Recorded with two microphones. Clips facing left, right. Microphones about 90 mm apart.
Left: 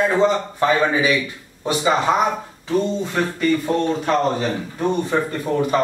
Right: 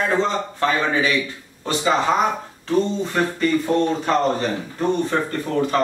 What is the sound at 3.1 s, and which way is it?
Speech, centre (ahead or behind).